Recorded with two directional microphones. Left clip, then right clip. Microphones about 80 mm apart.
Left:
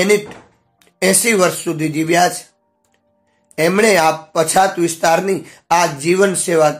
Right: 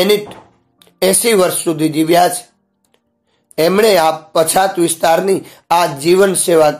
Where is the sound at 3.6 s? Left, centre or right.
Centre.